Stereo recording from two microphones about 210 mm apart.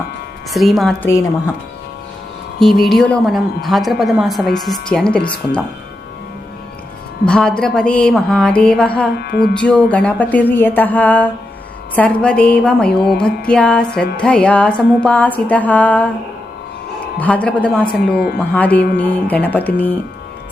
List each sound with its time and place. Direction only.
0.5 s a woman's voice: centre (ahead or behind)
2.8 s a woman's voice: centre (ahead or behind)
7.3 s a woman's voice: 5° left (ahead or behind)
9.2 s music: 50° left (ahead or behind)
9.6 s music: 5° left (ahead or behind)
11.9 s a woman's voice: 5° left (ahead or behind)
14.2 s music: 5° left (ahead or behind)
17.2 s music: 5° left (ahead or behind)
18.1 s music: 50° left (ahead or behind)
18.5 s music: 5° left (ahead or behind)